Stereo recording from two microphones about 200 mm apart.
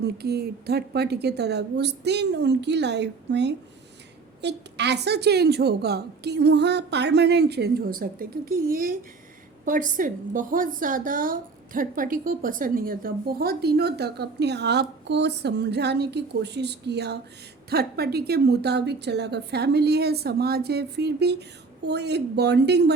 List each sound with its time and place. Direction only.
0.0 s a woman's voice: 55° right (ahead or behind)